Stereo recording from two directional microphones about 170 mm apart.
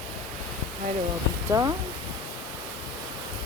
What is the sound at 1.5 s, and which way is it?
Speech, 20° right (ahead or behind).